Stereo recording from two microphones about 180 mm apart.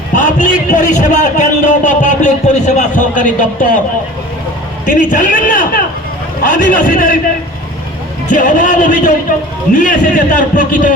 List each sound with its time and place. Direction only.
0.1 s a man's voice: 45° left (ahead or behind)
4.9 s a man's voice: 45° left (ahead or behind)
8.3 s a man's voice: 45° left (ahead or behind)